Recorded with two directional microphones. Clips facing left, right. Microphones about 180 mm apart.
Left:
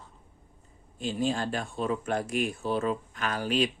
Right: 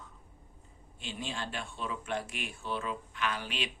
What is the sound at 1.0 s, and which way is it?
Speech, 40° left (ahead or behind).